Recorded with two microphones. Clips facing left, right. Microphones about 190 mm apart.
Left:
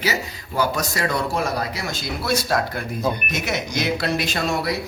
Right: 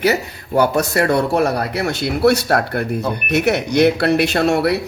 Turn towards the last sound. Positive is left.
turn(degrees=-65)  # may be behind; listen again after turning